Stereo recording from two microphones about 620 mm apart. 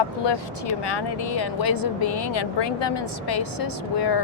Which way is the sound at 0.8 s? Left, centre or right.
Left.